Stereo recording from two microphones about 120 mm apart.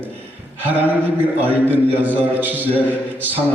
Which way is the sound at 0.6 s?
15° right (ahead or behind).